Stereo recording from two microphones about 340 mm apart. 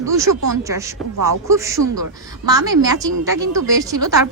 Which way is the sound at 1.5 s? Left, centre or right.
Centre.